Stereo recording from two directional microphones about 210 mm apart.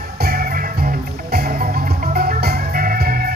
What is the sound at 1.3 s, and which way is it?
Organ, 45° right (ahead or behind).